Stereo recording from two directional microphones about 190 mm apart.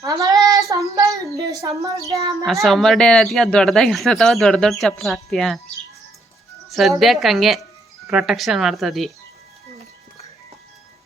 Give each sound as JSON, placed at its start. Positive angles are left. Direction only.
{"t": 0.0, "sound": "child singing", "side_deg": -20}
{"t": 0.7, "sound": "a sound", "side_deg": -15}
{"t": 2.6, "sound": "speech", "side_deg": 0}
{"t": 6.7, "sound": "speech", "side_deg": 0}